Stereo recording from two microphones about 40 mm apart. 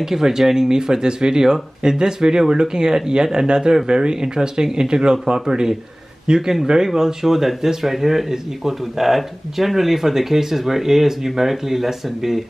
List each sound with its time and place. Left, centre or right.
0.0 s speech: centre